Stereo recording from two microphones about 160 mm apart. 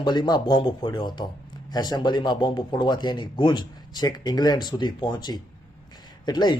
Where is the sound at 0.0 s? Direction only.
30° left (ahead or behind).